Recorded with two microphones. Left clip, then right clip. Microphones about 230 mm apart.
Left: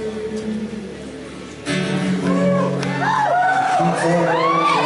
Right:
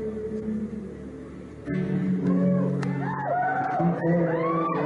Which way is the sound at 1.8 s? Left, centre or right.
Centre.